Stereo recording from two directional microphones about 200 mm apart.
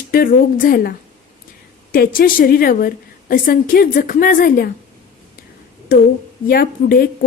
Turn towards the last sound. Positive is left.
turn(degrees=50)  # may be behind; listen again after turning